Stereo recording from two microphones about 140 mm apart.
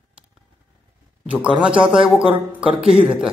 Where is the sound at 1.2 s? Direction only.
10° right (ahead or behind).